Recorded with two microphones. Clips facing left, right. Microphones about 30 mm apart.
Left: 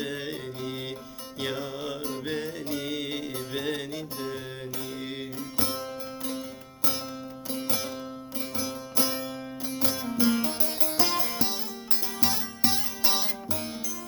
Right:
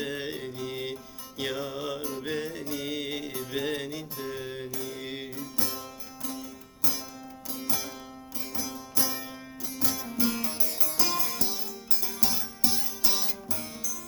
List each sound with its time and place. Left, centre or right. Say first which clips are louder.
0.0 s music: even; centre
2.2 s music: left 1 dB; centre
3.3 s music: right 2 dB; centre
5.5 s music: left 4 dB; left
7.5 s music: left 4 dB; left